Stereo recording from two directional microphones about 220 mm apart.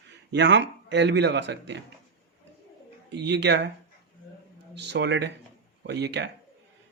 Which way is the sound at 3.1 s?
50° right (ahead or behind).